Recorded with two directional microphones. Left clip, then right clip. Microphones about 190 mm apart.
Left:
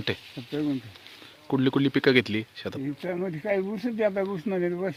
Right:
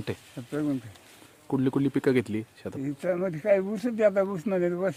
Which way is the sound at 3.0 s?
20° right (ahead or behind).